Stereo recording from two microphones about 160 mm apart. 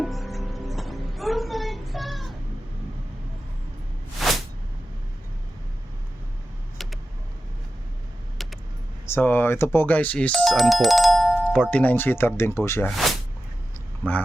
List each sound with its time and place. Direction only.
0.0 s music: centre (ahead or behind)
4.2 s a sound: centre (ahead or behind)
6.8 s computer keyboard: centre (ahead or behind)
8.4 s computer keyboard: centre (ahead or behind)
9.1 s speech: 15° left (ahead or behind)
14.0 s speech: 10° left (ahead or behind)